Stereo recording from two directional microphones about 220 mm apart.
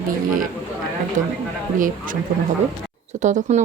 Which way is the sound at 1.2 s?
35° right (ahead or behind).